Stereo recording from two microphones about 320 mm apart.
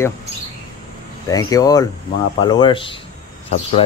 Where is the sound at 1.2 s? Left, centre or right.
Centre.